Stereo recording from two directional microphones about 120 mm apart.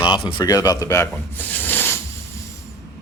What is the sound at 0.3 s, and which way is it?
Speech, 35° left (ahead or behind).